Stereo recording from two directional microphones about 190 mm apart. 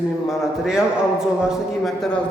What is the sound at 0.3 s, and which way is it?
A man's voice, centre (ahead or behind).